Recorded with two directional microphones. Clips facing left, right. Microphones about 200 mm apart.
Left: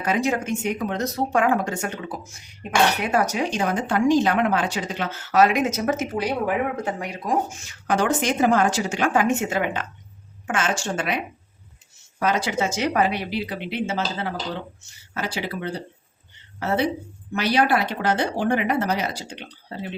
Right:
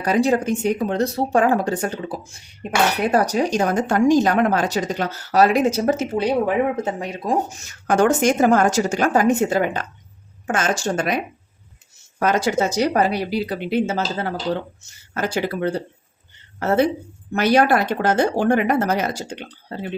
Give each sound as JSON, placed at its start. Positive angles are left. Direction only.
{"t": 0.0, "sound": "speech", "side_deg": -35}
{"t": 7.6, "sound": "speech", "side_deg": -45}
{"t": 12.2, "sound": "speech", "side_deg": -45}